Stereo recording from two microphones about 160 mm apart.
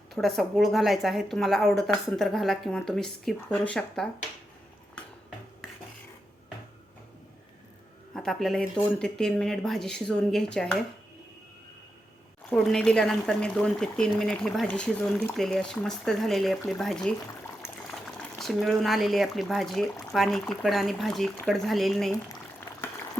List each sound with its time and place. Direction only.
0.1 s speech: centre (ahead or behind)
8.1 s speech: 5° left (ahead or behind)
12.5 s speech: 5° left (ahead or behind)